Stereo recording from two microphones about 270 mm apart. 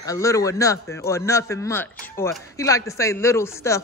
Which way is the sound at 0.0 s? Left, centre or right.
Centre.